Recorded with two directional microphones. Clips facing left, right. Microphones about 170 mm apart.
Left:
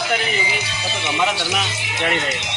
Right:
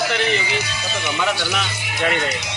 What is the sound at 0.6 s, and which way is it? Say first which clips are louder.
Speech: right 1 dB; 20° left (ahead or behind).